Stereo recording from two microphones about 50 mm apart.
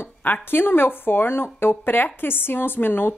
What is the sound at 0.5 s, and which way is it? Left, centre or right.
A woman's voice, left.